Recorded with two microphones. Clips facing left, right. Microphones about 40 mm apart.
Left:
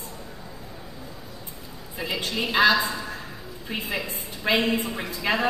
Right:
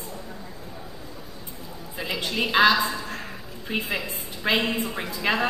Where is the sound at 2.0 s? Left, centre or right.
Right.